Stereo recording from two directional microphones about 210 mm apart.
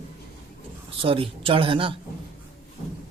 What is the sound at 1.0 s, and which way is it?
Speech, 25° right (ahead or behind).